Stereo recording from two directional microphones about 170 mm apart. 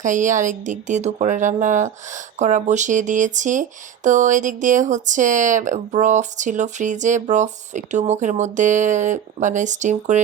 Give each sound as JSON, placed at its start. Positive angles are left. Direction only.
{"t": 0.0, "sound": "speech", "side_deg": -45}